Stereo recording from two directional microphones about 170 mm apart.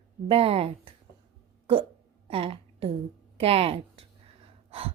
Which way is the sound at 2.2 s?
35° right (ahead or behind).